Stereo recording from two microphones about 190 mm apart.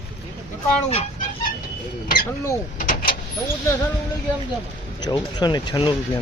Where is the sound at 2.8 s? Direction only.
50° left (ahead or behind).